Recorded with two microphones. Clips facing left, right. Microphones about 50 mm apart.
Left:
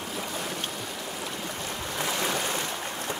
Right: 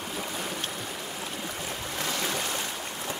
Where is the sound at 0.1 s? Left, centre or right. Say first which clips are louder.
Left 1 dB; centre.